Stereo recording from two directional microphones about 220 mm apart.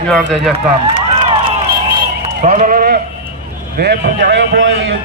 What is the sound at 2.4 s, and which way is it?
Sheep, 35° right (ahead or behind).